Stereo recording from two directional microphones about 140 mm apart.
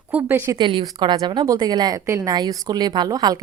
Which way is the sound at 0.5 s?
35° right (ahead or behind).